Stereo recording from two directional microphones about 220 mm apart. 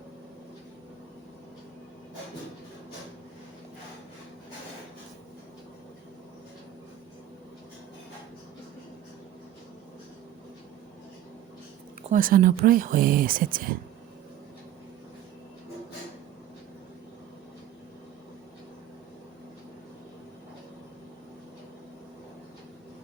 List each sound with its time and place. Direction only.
12.1 s speech: 40° right (ahead or behind)